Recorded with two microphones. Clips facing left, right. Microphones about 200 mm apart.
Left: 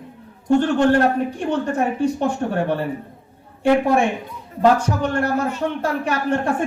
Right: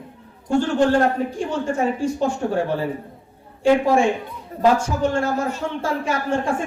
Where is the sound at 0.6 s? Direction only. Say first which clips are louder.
Right 1 dB; 60° left (ahead or behind).